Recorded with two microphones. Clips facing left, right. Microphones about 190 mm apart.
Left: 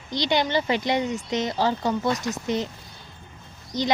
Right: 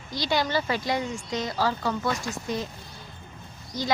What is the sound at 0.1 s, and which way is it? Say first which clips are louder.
Speech: left 3 dB; 20° left (ahead or behind).